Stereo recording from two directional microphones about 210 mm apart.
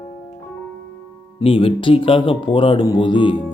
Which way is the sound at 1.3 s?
25° left (ahead or behind).